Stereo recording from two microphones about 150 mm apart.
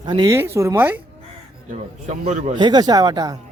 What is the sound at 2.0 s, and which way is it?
Speech, 50° right (ahead or behind).